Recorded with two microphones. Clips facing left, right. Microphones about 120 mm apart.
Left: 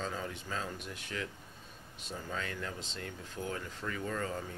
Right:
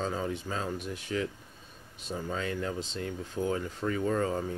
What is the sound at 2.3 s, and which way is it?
Speech, 25° right (ahead or behind).